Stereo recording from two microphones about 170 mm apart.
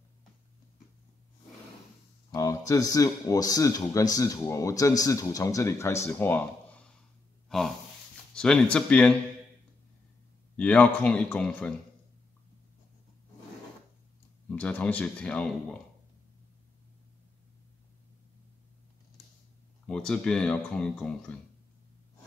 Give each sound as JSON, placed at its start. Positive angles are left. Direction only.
{"t": 2.3, "sound": "speech", "side_deg": 20}
{"t": 7.4, "sound": "gasp", "side_deg": 0}
{"t": 8.4, "sound": "speech", "side_deg": 5}
{"t": 10.5, "sound": "speech", "side_deg": 5}
{"t": 14.5, "sound": "speech", "side_deg": 10}
{"t": 19.9, "sound": "speech", "side_deg": 5}